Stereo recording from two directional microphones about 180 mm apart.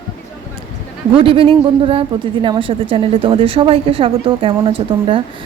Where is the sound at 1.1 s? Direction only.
30° right (ahead or behind).